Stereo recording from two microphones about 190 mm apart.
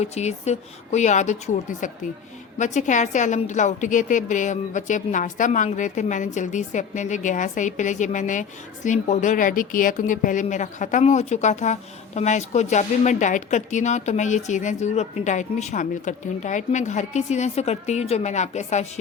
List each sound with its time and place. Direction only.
0.0 s a woman's voice: 35° left (ahead or behind)
2.6 s a woman's voice: 40° left (ahead or behind)